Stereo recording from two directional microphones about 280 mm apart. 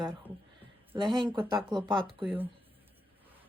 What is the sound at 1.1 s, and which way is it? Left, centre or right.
Speech, centre.